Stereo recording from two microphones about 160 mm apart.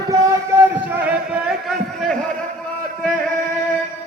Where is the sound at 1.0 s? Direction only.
Centre (ahead or behind).